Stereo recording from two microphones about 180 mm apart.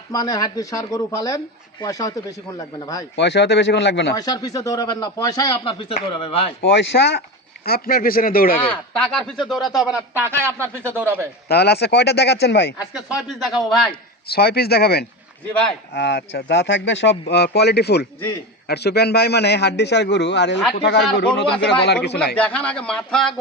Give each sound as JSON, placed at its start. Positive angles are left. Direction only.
{"t": 0.1, "sound": "a man's voice", "side_deg": 20}
{"t": 3.2, "sound": "speech", "side_deg": 75}
{"t": 4.1, "sound": "a man's voice", "side_deg": 20}
{"t": 6.6, "sound": "speech", "side_deg": 70}
{"t": 7.6, "sound": "speech", "side_deg": 55}
{"t": 9.0, "sound": "a man's voice", "side_deg": 5}
{"t": 9.9, "sound": "a man's voice", "side_deg": -10}
{"t": 11.4, "sound": "speech", "side_deg": 65}
{"t": 12.9, "sound": "a man's voice", "side_deg": -5}
{"t": 14.3, "sound": "speech", "side_deg": 60}
{"t": 16.0, "sound": "speech", "side_deg": 75}
{"t": 22.4, "sound": "a man's voice", "side_deg": 5}